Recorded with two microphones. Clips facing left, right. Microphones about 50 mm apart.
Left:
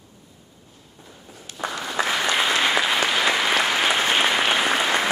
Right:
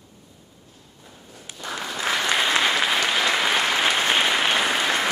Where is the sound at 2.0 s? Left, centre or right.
Centre.